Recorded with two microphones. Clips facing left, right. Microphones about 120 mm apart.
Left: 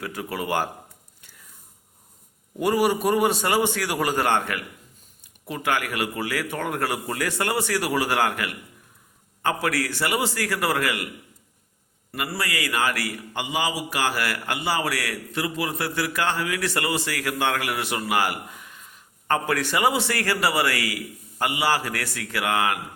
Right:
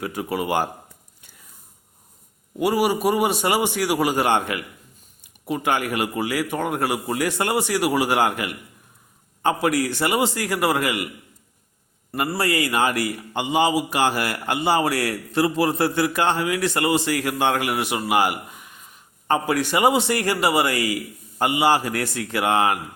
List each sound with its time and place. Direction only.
0.0 s speech: 15° right (ahead or behind)
2.6 s a man's voice: 10° right (ahead or behind)
12.3 s a man's voice: 30° right (ahead or behind)